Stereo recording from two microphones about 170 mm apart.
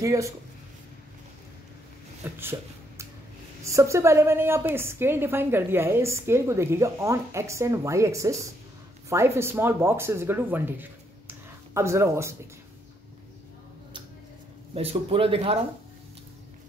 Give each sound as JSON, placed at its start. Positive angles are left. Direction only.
{"t": 0.0, "sound": "speech", "side_deg": -20}
{"t": 2.2, "sound": "a woman's voice", "side_deg": -15}
{"t": 3.6, "sound": "a woman's voice", "side_deg": -15}
{"t": 14.7, "sound": "speech", "side_deg": -35}